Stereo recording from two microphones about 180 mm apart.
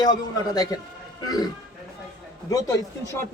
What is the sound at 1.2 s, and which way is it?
Speech, 20° left (ahead or behind).